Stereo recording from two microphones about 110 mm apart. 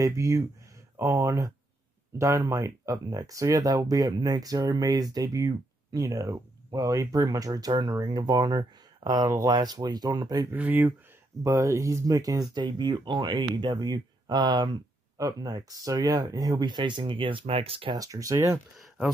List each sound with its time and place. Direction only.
0.0 s speech: 30° right (ahead or behind)
10.5 s speech: 15° right (ahead or behind)
11.4 s speech: 30° right (ahead or behind); by 17.9 s 55° right (ahead or behind)
17.9 s speech: 30° right (ahead or behind)